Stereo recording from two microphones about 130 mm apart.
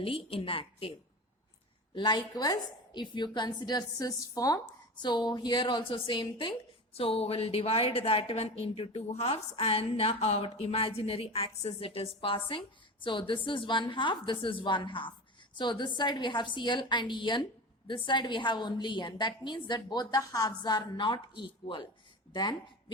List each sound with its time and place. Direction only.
0.0 s a woman's voice: 45° left (ahead or behind)
2.0 s a woman's voice: 35° left (ahead or behind)
6.9 s a woman's voice: 50° left (ahead or behind)